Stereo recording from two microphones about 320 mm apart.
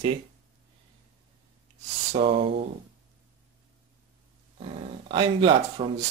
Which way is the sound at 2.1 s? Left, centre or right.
Centre.